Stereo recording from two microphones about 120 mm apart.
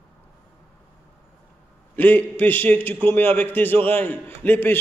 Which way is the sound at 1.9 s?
15° left (ahead or behind).